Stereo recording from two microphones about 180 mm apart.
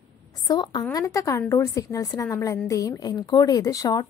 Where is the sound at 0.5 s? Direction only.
25° left (ahead or behind).